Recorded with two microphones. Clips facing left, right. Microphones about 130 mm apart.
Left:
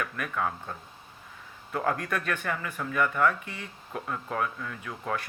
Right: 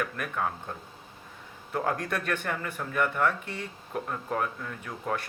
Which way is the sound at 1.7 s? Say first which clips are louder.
Even; 35° right (ahead or behind).